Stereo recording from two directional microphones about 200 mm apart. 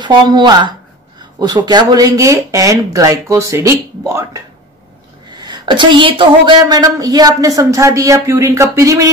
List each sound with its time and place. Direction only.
0.0 s a woman's voice: 20° right (ahead or behind)
5.4 s a woman's voice: 20° right (ahead or behind)